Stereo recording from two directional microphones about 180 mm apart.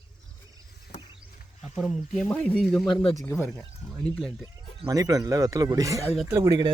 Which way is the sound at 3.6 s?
Centre (ahead or behind).